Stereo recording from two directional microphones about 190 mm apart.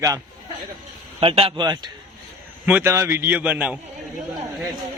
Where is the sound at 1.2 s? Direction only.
30° right (ahead or behind).